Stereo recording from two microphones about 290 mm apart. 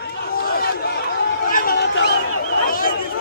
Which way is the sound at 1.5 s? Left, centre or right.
Left.